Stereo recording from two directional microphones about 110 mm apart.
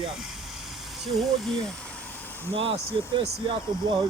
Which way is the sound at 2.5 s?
55° right (ahead or behind).